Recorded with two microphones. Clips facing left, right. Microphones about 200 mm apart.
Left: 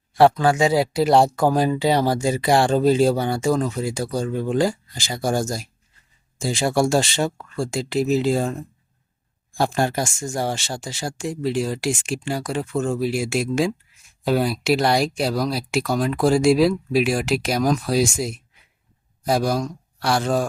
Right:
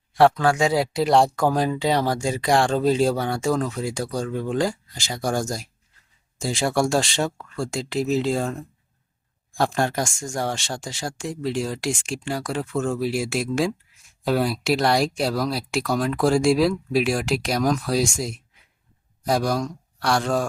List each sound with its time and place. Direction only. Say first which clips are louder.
0.2 s speech: left 2 dB; centre (ahead or behind)
9.6 s speech: left 1 dB; 5° left (ahead or behind)